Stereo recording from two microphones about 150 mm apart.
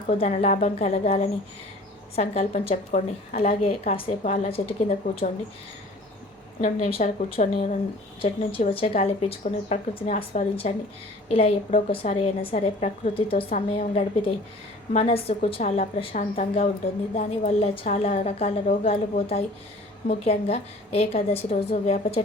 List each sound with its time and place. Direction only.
0.1 s a woman's voice: 45° left (ahead or behind)
6.6 s a woman's voice: 50° left (ahead or behind)